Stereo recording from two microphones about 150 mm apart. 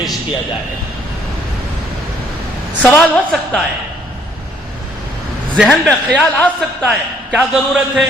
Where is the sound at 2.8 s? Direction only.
5° left (ahead or behind).